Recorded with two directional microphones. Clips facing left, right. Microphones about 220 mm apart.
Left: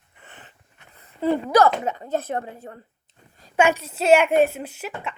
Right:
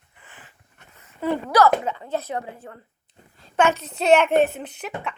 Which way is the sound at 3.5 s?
10° left (ahead or behind).